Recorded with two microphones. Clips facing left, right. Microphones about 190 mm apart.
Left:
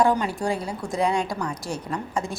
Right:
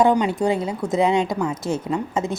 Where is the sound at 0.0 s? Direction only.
20° right (ahead or behind).